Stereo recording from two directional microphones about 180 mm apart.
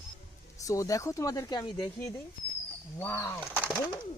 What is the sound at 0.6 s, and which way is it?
Speech, 20° left (ahead or behind).